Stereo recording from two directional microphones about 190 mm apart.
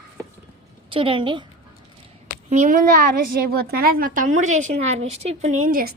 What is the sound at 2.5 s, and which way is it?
A woman's voice, 40° right (ahead or behind).